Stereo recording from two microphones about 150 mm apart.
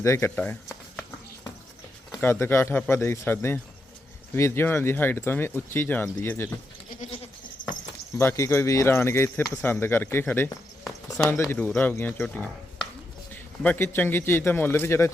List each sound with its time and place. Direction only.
0.0 s speech: 20° left (ahead or behind)
2.2 s speech: 15° left (ahead or behind)
8.2 s speech: 15° left (ahead or behind)